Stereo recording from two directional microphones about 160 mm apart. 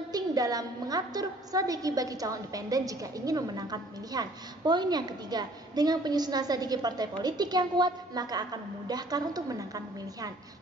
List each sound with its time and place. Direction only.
0.1 s a woman's voice: 25° right (ahead or behind)